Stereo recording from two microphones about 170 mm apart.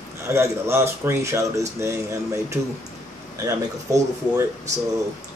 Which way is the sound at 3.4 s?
20° right (ahead or behind).